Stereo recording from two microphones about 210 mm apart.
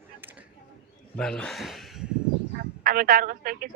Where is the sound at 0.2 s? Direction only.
10° right (ahead or behind).